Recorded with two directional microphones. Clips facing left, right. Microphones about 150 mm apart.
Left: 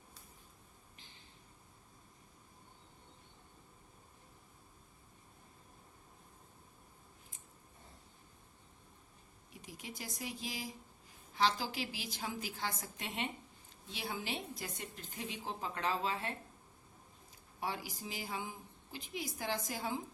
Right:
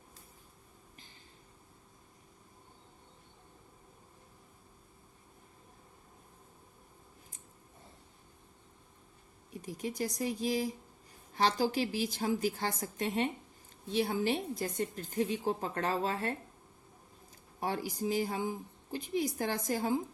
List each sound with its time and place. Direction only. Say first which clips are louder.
9.5 s a woman's voice: right 11 dB; 45° right (ahead or behind)
17.6 s a woman's voice: right 7 dB; 45° right (ahead or behind)